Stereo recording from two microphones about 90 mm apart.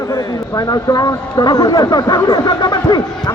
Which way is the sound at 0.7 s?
45° left (ahead or behind).